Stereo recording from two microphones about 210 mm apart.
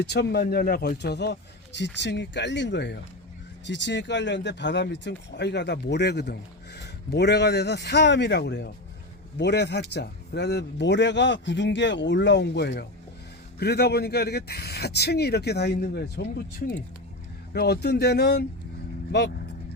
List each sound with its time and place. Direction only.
0.0 s a man's voice: 50° left (ahead or behind)